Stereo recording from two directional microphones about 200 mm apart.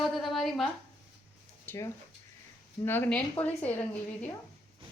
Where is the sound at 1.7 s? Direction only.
10° left (ahead or behind).